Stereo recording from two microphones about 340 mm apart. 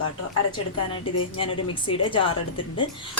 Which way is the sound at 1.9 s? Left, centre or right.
Centre.